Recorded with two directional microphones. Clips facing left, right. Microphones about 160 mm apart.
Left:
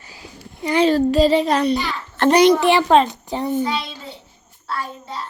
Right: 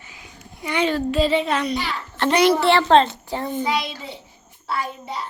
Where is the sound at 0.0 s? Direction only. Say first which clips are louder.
Left 4 dB; 35° left (ahead or behind).